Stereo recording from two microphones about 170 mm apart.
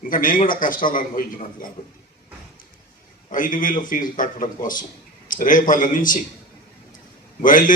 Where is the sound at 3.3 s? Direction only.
50° left (ahead or behind).